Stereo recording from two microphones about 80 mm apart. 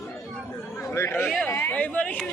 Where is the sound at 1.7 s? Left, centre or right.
Centre.